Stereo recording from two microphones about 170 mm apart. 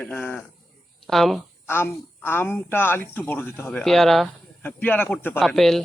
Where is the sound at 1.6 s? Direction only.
15° left (ahead or behind).